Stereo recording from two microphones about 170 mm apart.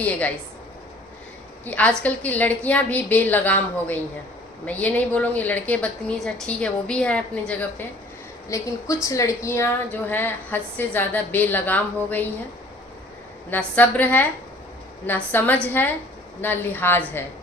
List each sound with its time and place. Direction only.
1.6 s a woman's voice: 10° left (ahead or behind)
8.4 s a woman's voice: 20° left (ahead or behind)
13.5 s a woman's voice: 10° left (ahead or behind)